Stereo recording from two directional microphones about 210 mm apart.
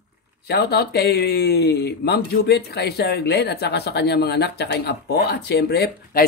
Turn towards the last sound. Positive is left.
turn(degrees=45)  # may be behind; listen again after turning